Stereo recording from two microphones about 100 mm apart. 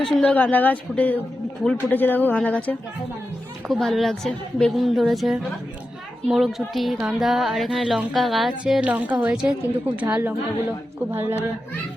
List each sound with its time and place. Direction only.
0.0 s a woman's voice: 10° left (ahead or behind)
3.7 s speech: centre (ahead or behind)
8.6 s a woman's voice: 15° right (ahead or behind)